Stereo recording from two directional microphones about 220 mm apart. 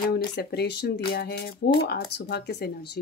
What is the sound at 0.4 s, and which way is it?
A woman's voice, 45° left (ahead or behind).